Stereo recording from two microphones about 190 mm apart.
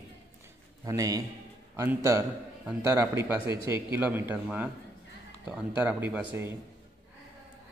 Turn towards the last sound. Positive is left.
turn(degrees=-10)  # may be behind; listen again after turning